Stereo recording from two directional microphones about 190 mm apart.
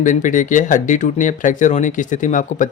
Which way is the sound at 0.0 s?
40° left (ahead or behind).